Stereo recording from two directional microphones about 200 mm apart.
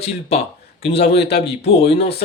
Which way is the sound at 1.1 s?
55° left (ahead or behind).